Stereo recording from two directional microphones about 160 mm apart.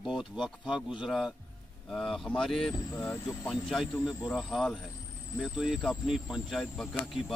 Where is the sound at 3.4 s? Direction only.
Centre (ahead or behind).